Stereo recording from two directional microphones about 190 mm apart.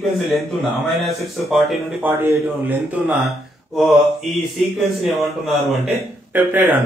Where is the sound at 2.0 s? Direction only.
10° right (ahead or behind).